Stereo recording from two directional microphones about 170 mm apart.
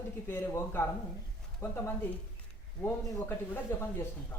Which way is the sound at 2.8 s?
10° left (ahead or behind).